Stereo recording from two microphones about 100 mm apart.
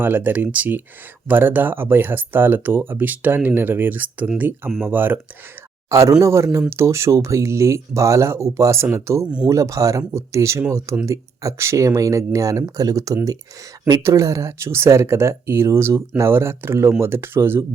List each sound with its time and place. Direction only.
0.0 s speech: 20° right (ahead or behind)
5.9 s speech: 30° right (ahead or behind)
9.2 s speech: 10° right (ahead or behind)
9.5 s speech: 30° right (ahead or behind)